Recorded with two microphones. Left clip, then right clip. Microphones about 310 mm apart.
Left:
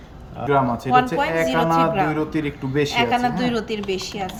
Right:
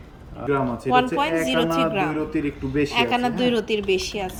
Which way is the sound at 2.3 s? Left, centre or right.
Left.